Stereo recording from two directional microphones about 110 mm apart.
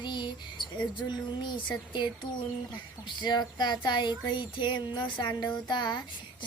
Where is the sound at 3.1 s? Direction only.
40° left (ahead or behind).